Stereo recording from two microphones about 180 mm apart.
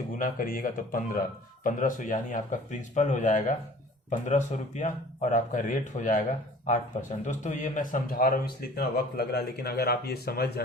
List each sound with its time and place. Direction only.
0.1 s speech: 50° left (ahead or behind)